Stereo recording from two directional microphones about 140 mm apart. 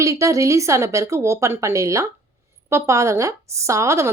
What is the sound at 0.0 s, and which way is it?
Speech, 20° right (ahead or behind).